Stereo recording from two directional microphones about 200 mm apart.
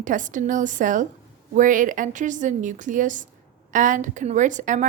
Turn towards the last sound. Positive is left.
turn(degrees=-40)  # may be behind; listen again after turning